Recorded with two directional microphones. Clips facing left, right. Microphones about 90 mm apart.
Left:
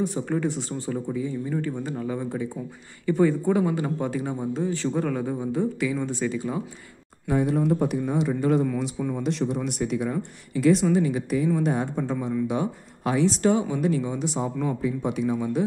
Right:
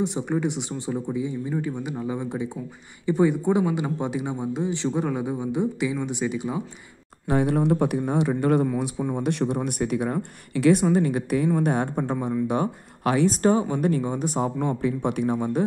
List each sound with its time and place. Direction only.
0.0 s a man's voice: 20° right (ahead or behind)
7.2 s a woman's voice: 65° right (ahead or behind)
8.6 s speech: 15° right (ahead or behind)
9.2 s a woman's voice: 60° right (ahead or behind)
13.3 s speech: 40° right (ahead or behind)
14.8 s a woman's voice: 60° right (ahead or behind)